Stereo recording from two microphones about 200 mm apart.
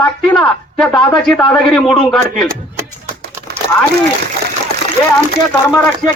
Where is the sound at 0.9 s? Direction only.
25° left (ahead or behind).